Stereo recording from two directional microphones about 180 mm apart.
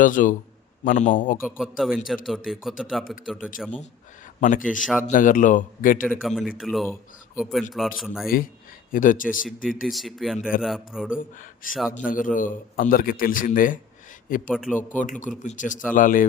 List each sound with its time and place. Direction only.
0.0 s a man's voice: 45° left (ahead or behind)
1.4 s a man's voice: 5° right (ahead or behind)
4.4 s speech: 45° left (ahead or behind)
4.8 s a man's voice: centre (ahead or behind)
5.0 s a man's voice: 45° left (ahead or behind)
6.1 s a man's voice: centre (ahead or behind)
8.9 s a man's voice: 45° left (ahead or behind)
9.8 s a man's voice: centre (ahead or behind)
11.9 s a man's voice: 50° left (ahead or behind)
14.5 s a man's voice: 5° right (ahead or behind)
15.0 s a man's voice: 45° left (ahead or behind)